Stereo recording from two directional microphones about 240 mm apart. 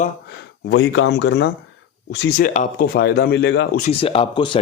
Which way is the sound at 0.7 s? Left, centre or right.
Left.